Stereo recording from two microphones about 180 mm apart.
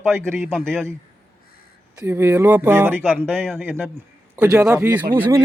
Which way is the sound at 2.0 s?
15° right (ahead or behind).